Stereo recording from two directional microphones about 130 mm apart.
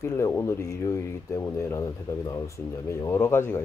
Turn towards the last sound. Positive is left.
turn(degrees=20)  # may be behind; listen again after turning